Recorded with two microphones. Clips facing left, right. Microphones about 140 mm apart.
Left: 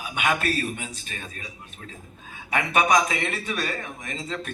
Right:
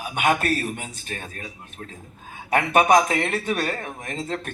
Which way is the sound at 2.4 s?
50° right (ahead or behind).